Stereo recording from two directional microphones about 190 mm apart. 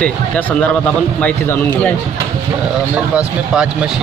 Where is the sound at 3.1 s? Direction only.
5° right (ahead or behind).